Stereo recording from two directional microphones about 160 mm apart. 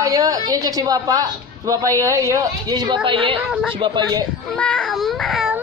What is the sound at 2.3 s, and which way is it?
A woman's voice, 25° right (ahead or behind).